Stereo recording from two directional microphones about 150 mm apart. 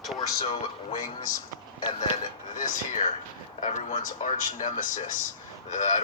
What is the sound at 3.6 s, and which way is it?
Speech, 55° left (ahead or behind).